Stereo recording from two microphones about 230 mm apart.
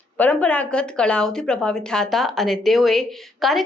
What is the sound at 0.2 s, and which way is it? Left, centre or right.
A woman's voice, centre.